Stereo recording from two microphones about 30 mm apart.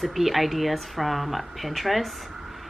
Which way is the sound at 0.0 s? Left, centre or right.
Centre.